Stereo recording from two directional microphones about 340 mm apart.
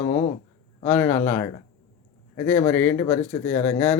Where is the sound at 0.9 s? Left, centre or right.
Centre.